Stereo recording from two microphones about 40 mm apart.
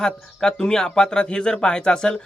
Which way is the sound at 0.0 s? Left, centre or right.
Centre.